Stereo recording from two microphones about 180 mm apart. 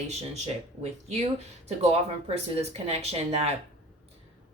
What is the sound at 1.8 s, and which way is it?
Speech, 35° right (ahead or behind).